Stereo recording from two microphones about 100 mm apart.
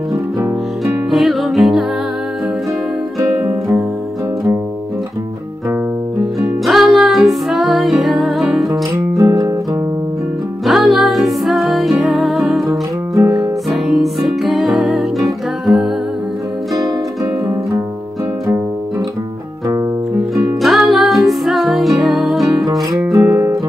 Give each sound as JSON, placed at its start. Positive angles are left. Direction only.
{"t": 1.1, "sound": "music", "side_deg": 0}
{"t": 3.2, "sound": "music", "side_deg": -25}
{"t": 6.4, "sound": "music", "side_deg": -5}
{"t": 9.2, "sound": "music", "side_deg": -35}
{"t": 10.6, "sound": "music", "side_deg": 0}
{"t": 13.1, "sound": "music", "side_deg": -35}
{"t": 13.4, "sound": "music", "side_deg": -5}
{"t": 20.6, "sound": "music", "side_deg": 0}
{"t": 23.2, "sound": "music", "side_deg": -20}